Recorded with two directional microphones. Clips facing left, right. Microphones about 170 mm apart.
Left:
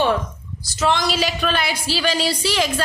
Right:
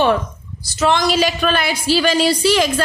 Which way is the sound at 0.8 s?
55° right (ahead or behind).